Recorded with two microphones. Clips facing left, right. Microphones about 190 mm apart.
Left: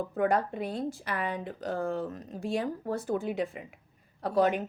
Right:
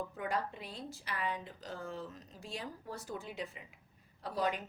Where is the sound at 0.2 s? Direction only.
55° left (ahead or behind).